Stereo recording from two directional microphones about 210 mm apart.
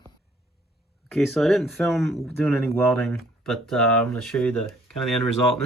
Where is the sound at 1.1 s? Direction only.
Centre (ahead or behind).